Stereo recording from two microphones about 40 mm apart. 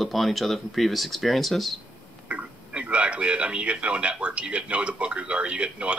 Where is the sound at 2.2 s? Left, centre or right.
Right.